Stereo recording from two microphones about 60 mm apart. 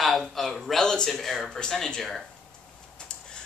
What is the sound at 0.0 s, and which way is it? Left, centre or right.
Speech, centre.